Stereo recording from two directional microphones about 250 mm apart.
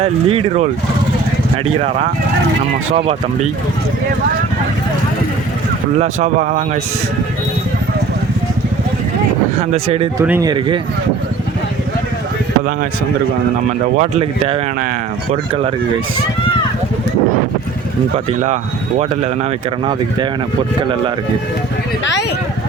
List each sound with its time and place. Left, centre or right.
0.0 s speech: right
2.9 s speech: right
6.0 s speech: right
9.6 s speech: right
10.2 s speech: centre
13.9 s speech: right